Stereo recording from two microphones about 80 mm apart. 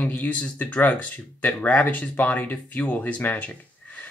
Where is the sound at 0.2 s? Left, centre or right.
Centre.